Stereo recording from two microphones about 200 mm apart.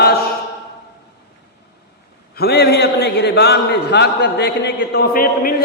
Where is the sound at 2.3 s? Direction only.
55° left (ahead or behind).